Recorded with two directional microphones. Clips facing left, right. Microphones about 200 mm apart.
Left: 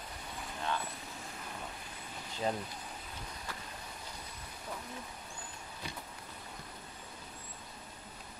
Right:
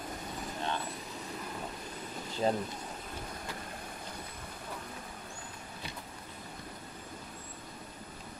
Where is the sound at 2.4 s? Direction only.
40° right (ahead or behind).